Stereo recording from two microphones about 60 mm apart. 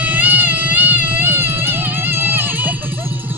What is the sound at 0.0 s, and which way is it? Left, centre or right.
Music, right.